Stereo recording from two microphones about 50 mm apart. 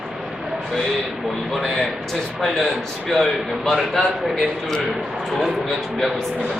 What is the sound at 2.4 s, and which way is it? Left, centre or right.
A man's voice, centre.